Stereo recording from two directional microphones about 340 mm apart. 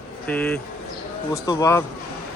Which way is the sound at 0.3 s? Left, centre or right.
Centre.